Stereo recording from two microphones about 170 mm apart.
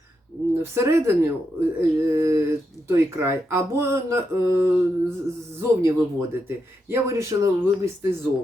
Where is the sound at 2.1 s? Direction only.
15° right (ahead or behind).